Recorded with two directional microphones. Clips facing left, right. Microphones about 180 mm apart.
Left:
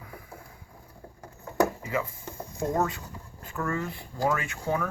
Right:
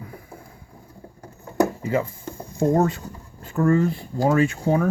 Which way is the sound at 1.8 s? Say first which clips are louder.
Right 7 dB; 30° right (ahead or behind).